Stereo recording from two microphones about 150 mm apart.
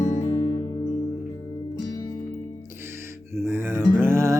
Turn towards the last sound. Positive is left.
turn(degrees=-20)  # may be behind; listen again after turning